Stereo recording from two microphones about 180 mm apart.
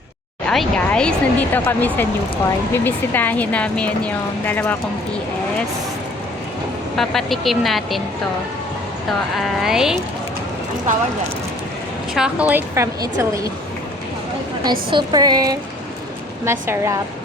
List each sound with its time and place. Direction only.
0.4 s speech: 5° left (ahead or behind)
6.9 s speech: centre (ahead or behind)
9.3 s speech: centre (ahead or behind)
10.9 s speech: 45° right (ahead or behind)
12.1 s a woman's voice: 5° right (ahead or behind)
14.8 s a woman's voice: 25° right (ahead or behind)